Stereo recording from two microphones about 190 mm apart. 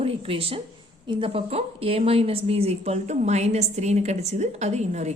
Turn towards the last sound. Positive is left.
turn(degrees=-35)  # may be behind; listen again after turning